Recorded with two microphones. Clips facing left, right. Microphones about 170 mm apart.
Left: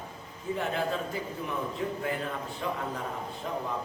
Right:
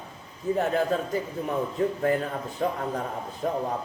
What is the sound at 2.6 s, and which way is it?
Speech, 45° right (ahead or behind).